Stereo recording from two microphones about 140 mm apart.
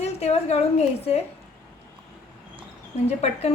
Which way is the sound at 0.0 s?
50° left (ahead or behind).